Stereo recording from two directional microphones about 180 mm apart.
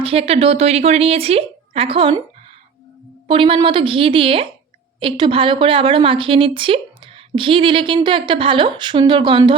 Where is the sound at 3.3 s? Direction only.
30° right (ahead or behind).